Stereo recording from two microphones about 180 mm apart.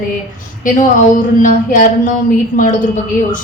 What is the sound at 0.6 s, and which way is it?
Speech, 45° left (ahead or behind).